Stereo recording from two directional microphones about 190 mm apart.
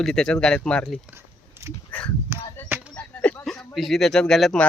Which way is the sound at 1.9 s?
5° left (ahead or behind).